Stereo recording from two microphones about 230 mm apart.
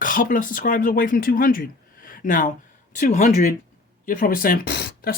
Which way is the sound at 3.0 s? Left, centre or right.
Left.